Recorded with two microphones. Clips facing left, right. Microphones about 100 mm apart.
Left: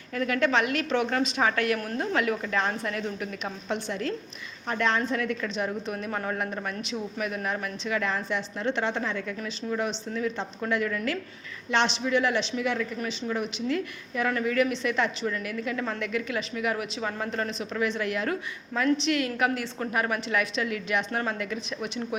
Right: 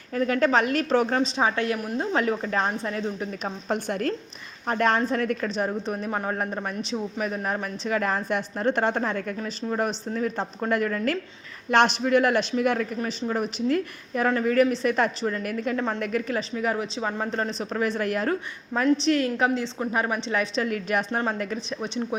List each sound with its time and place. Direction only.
0.1 s a woman's voice: 35° right (ahead or behind)
3.7 s a woman's voice: 50° right (ahead or behind)
21.1 s a woman's voice: 25° right (ahead or behind)